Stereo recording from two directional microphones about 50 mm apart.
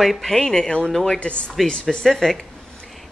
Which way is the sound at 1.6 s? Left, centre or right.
Centre.